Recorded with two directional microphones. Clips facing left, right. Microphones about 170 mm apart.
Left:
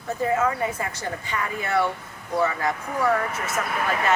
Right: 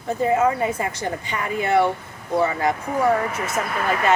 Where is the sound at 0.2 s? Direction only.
20° right (ahead or behind).